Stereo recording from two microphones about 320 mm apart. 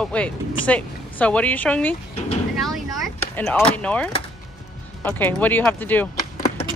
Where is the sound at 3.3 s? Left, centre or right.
Centre.